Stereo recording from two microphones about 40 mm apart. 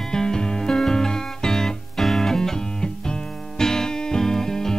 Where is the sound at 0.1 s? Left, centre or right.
Centre.